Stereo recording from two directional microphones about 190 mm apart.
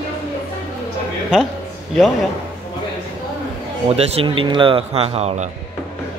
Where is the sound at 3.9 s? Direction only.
30° right (ahead or behind).